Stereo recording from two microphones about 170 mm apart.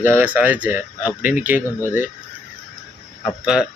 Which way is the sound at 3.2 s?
5° right (ahead or behind).